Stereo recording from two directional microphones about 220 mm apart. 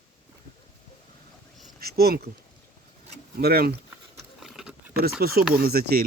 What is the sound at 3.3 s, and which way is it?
Speech, 45° right (ahead or behind).